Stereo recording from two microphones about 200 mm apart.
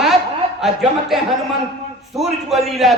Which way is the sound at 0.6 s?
Centre (ahead or behind).